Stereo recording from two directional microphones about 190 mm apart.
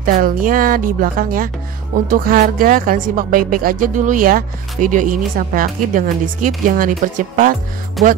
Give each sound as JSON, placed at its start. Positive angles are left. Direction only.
{"t": 0.0, "sound": "speech", "side_deg": -45}
{"t": 8.0, "sound": "music", "side_deg": 0}